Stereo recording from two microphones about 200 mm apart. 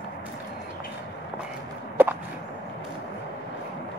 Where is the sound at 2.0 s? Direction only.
10° right (ahead or behind).